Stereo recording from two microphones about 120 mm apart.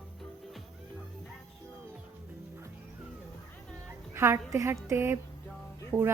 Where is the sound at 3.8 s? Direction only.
20° right (ahead or behind).